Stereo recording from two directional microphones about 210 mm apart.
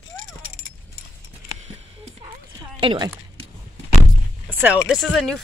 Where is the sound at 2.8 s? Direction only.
25° right (ahead or behind).